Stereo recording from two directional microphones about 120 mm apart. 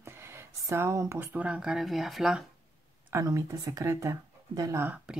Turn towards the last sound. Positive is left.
turn(degrees=-20)  # may be behind; listen again after turning